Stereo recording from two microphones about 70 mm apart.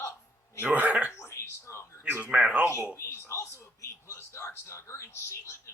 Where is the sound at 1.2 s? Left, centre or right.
Left.